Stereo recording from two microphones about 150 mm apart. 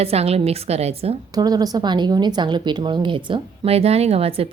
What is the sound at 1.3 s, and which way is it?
A woman's voice, 25° right (ahead or behind).